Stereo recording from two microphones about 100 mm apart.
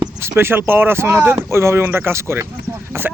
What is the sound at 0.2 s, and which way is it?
Speech, 25° right (ahead or behind).